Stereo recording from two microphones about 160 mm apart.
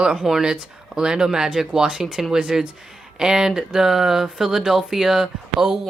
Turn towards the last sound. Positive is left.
turn(degrees=-5)  # may be behind; listen again after turning